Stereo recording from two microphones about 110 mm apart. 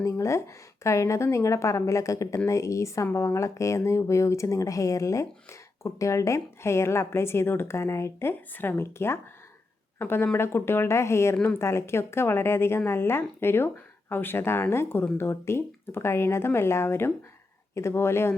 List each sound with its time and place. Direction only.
0.0 s speech: 25° left (ahead or behind)